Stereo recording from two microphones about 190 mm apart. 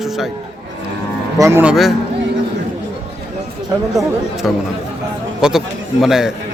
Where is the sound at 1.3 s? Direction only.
15° right (ahead or behind).